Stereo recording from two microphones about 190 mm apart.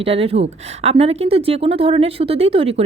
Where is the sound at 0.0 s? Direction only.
30° right (ahead or behind).